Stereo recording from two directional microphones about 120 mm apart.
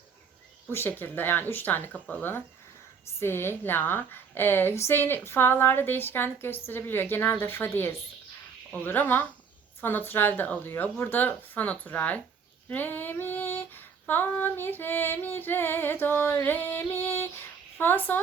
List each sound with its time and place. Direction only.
0.7 s female singing: 20° left (ahead or behind)
6.7 s a woman's voice: 15° left (ahead or behind)
8.7 s female singing: 15° left (ahead or behind)